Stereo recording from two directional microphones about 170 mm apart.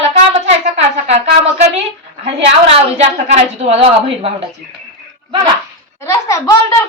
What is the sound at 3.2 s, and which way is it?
A woman's voice, 40° right (ahead or behind).